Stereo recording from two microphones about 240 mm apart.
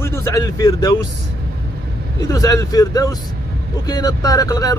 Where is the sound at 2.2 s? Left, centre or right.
Centre.